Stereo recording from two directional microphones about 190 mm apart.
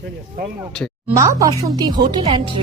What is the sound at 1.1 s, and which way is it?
Speech, 15° right (ahead or behind).